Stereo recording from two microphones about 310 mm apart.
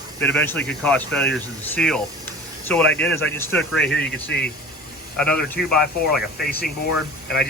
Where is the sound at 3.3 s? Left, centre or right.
Centre.